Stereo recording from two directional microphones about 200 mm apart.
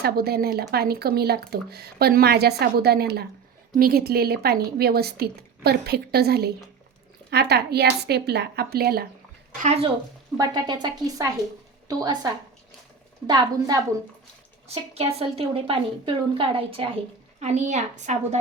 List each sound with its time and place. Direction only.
0.0 s speech: 50° right (ahead or behind)
9.6 s a woman's voice: 30° right (ahead or behind)
10.3 s a woman's voice: 20° right (ahead or behind)
15.2 s a woman's voice: 30° right (ahead or behind)